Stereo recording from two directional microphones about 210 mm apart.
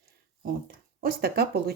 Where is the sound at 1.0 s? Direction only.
45° right (ahead or behind).